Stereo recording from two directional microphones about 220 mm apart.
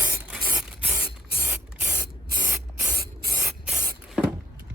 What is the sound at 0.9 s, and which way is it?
Spray, 40° right (ahead or behind).